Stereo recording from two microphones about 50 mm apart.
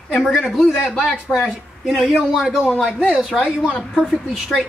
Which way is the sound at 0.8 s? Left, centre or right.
Centre.